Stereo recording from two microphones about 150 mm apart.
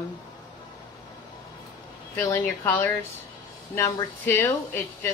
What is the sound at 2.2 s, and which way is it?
Speech, 15° left (ahead or behind).